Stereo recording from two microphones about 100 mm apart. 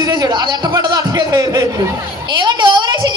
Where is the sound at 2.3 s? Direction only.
50° right (ahead or behind).